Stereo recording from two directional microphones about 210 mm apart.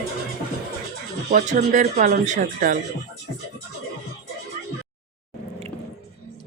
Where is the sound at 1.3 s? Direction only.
35° right (ahead or behind).